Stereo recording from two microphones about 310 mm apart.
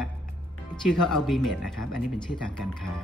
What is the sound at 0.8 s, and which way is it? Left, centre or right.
Speech, centre.